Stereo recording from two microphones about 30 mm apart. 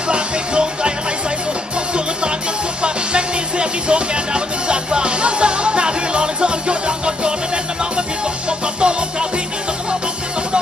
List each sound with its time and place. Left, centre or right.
0.1 s music: right